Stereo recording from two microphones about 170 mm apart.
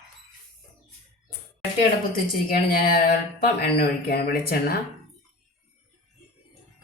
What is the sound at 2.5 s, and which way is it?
Speech, 55° left (ahead or behind).